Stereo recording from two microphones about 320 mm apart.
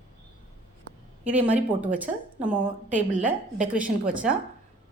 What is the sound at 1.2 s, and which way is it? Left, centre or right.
A woman's voice, centre.